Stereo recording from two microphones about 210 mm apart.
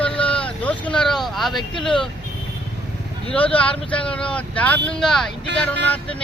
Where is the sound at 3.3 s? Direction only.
5° left (ahead or behind).